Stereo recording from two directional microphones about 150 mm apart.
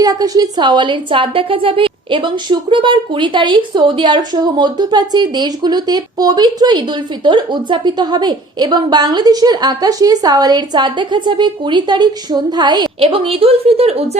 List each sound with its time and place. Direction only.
0.0 s a woman's voice: 25° right (ahead or behind)
13.0 s a woman's voice: 40° right (ahead or behind)